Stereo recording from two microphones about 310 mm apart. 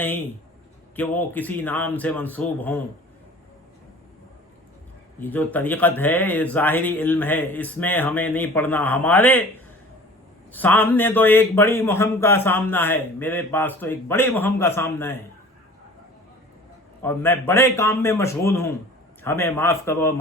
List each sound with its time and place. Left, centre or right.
0.9 s speech: centre
5.2 s speech: centre
10.5 s a man's voice: centre
17.0 s a man's voice: centre